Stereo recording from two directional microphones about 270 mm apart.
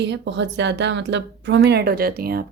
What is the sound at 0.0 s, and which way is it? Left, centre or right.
A woman's voice, right.